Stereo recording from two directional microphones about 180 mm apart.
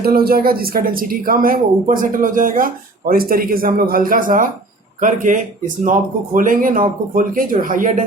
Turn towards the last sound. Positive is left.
turn(degrees=-45)  # may be behind; listen again after turning